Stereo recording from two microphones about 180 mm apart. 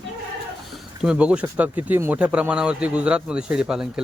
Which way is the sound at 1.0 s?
5° right (ahead or behind).